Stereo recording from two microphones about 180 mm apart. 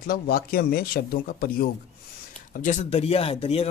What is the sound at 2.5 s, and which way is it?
Speech, 45° left (ahead or behind).